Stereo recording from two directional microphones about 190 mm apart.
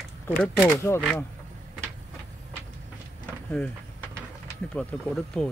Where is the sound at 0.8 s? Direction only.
15° left (ahead or behind).